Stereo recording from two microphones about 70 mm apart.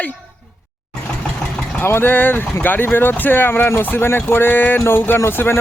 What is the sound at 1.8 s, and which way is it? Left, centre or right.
Speech, left.